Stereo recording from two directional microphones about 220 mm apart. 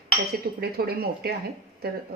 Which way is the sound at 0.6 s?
45° right (ahead or behind).